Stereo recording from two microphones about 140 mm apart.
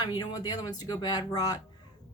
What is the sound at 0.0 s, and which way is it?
Speech, 30° left (ahead or behind).